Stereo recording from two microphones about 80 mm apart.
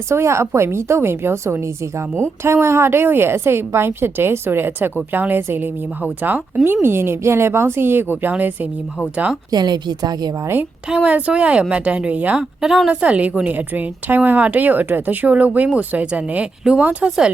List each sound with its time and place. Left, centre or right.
0.1 s a woman's voice: right
9.5 s a woman's voice: right
10.8 s speech: centre
12.4 s speech: centre
12.9 s a woman's voice: centre